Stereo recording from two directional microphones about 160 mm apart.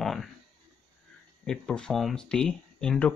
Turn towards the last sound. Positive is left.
turn(degrees=5)  # may be behind; listen again after turning